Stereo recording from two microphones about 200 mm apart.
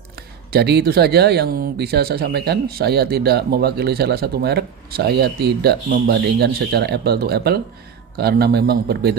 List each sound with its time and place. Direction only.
0.5 s speech: 55° right (ahead or behind)